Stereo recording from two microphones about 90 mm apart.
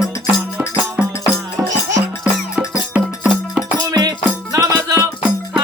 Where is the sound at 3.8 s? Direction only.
50° right (ahead or behind).